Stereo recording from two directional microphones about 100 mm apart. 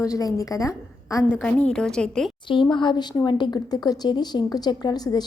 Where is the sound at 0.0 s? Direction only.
35° left (ahead or behind).